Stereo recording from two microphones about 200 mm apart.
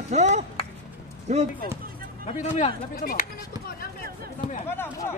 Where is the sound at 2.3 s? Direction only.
35° left (ahead or behind).